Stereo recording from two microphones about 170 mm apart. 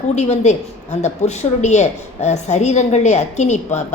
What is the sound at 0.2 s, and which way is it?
A woman's voice, 40° left (ahead or behind).